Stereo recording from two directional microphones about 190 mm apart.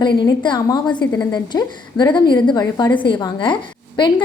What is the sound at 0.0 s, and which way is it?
A woman's voice, 25° left (ahead or behind).